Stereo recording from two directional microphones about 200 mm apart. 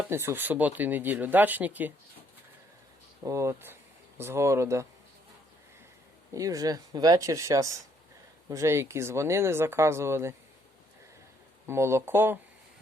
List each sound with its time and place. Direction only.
0.1 s speech: 10° right (ahead or behind)
3.2 s speech: 15° right (ahead or behind)
6.3 s speech: 15° right (ahead or behind)
11.6 s speech: 15° right (ahead or behind)